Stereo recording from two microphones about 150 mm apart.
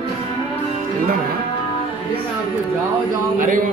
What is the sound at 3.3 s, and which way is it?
Speech, 65° right (ahead or behind).